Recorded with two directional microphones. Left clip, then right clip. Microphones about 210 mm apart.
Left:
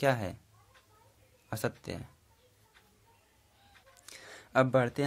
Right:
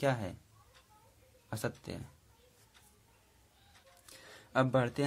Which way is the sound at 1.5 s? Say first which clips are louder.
Left 4 dB; 15° left (ahead or behind).